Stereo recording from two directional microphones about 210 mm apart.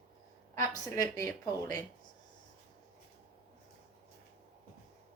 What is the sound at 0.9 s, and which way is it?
Speech, 15° left (ahead or behind).